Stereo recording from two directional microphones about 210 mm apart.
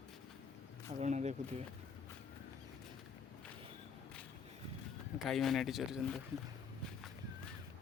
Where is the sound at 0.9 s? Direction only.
35° right (ahead or behind).